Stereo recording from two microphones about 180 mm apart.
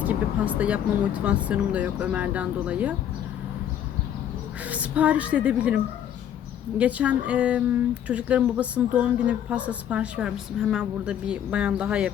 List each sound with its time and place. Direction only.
0.0 s speech: 10° right (ahead or behind)
4.6 s speech: 10° right (ahead or behind)